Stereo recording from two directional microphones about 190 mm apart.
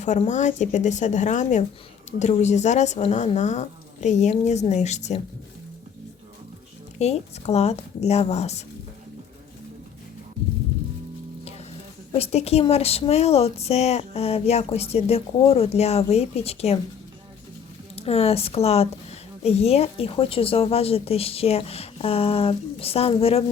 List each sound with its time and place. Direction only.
0.0 s speech: 40° left (ahead or behind)
7.0 s speech: 35° left (ahead or behind)
12.1 s speech: 35° left (ahead or behind)
17.9 s speech: 30° left (ahead or behind)